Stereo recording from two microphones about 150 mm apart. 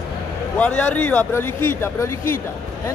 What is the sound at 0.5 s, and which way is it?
A man's voice, 10° left (ahead or behind).